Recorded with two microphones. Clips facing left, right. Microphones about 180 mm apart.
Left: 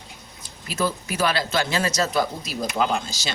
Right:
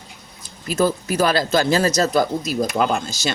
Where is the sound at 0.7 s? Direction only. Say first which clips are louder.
Right 6 dB; 45° right (ahead or behind).